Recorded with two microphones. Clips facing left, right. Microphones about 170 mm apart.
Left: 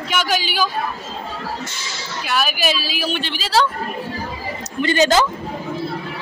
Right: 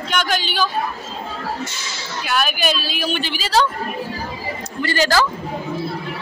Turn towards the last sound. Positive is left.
turn(degrees=20)  # may be behind; listen again after turning